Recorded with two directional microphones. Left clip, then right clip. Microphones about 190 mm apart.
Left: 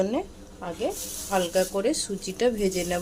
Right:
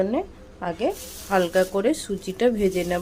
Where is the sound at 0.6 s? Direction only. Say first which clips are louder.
Right 4 dB; 20° right (ahead or behind).